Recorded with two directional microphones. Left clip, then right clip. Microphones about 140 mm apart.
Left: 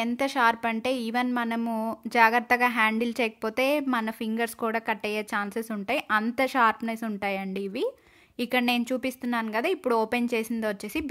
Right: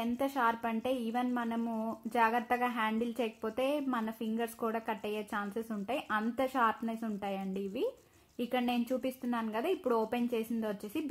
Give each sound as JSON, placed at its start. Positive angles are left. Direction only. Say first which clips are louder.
{"t": 0.0, "sound": "a woman's voice", "louder": "left 8 dB", "side_deg": 30}